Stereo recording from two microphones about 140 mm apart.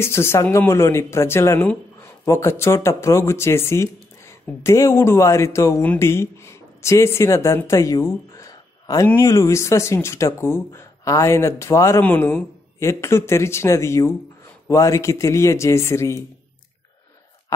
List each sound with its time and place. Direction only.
0.0 s speech: 15° left (ahead or behind)